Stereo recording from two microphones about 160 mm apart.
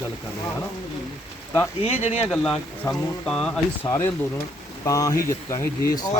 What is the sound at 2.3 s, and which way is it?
Speech, 5° left (ahead or behind).